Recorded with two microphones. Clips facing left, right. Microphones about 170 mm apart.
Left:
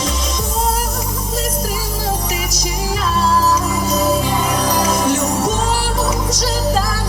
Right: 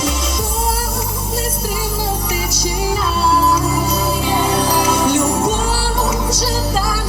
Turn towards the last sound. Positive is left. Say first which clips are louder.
# right 1 dB
turn(degrees=-30)  # may be behind; listen again after turning